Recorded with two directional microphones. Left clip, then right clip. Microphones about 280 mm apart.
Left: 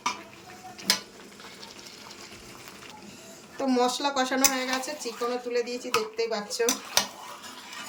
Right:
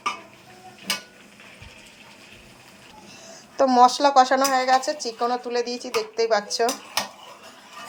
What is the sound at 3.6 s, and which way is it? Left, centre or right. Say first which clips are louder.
Speech: right 10 dB; centre.